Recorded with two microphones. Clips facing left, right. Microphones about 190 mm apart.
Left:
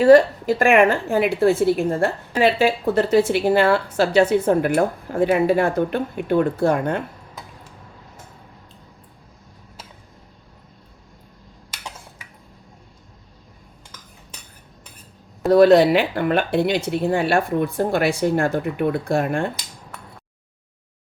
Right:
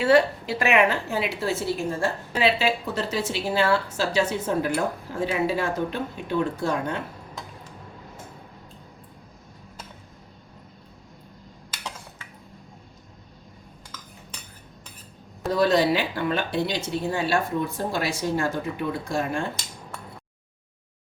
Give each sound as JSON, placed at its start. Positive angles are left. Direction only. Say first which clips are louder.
{"t": 0.0, "sound": "a woman's voice", "louder": "left 7 dB", "side_deg": 45}
{"t": 15.5, "sound": "a woman's voice", "louder": "left 8 dB", "side_deg": 60}